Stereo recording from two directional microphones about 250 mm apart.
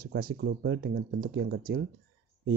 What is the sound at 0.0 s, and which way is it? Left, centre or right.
Speech, right.